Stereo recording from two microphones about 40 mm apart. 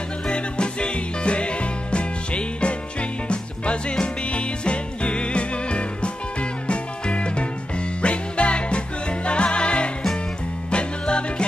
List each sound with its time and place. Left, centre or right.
0.3 s music: left